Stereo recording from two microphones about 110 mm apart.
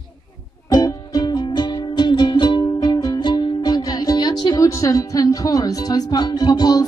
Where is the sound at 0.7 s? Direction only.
35° left (ahead or behind).